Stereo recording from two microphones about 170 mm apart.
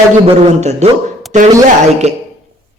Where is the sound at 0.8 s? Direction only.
40° right (ahead or behind).